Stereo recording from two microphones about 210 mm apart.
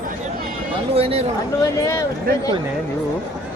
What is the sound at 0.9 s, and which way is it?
Speech, 30° right (ahead or behind).